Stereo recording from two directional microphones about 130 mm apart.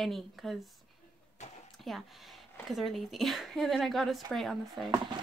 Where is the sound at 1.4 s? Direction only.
65° left (ahead or behind).